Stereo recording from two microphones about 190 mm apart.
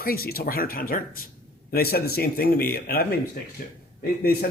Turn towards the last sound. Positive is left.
turn(degrees=50)  # may be behind; listen again after turning